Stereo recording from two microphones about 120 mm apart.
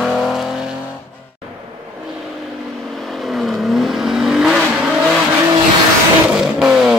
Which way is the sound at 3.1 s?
Centre (ahead or behind).